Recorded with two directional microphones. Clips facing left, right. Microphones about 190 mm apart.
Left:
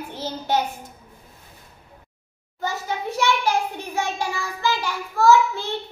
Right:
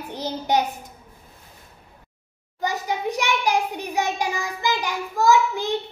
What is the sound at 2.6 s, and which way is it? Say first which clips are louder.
A child's voice: right 2 dB; 15° right (ahead or behind).